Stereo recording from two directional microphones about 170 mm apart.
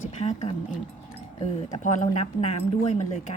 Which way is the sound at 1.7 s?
45° left (ahead or behind).